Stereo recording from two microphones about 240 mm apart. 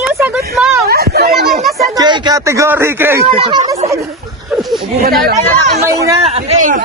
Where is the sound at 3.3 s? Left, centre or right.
Right.